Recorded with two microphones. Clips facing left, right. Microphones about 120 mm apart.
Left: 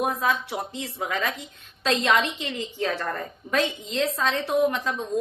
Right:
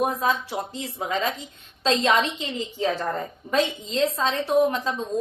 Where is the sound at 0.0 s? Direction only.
30° right (ahead or behind).